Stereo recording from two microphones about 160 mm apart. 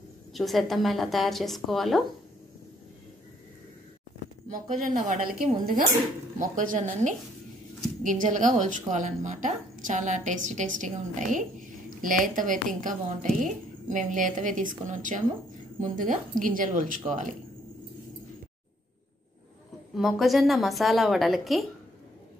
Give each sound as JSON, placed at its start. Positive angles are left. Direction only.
{"t": 0.3, "sound": "a woman's voice", "side_deg": 0}
{"t": 4.5, "sound": "a woman's voice", "side_deg": -50}
{"t": 6.5, "sound": "a woman's voice", "side_deg": -55}
{"t": 19.9, "sound": "a woman's voice", "side_deg": 0}